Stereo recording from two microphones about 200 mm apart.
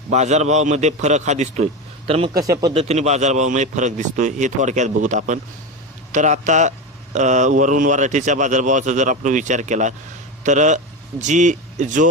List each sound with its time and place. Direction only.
0.1 s speech: 35° right (ahead or behind); by 2.7 s 15° right (ahead or behind)
2.7 s speech: 35° right (ahead or behind)